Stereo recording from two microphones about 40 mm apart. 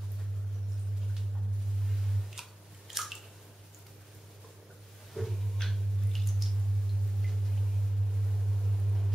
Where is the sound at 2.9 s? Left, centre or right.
Centre.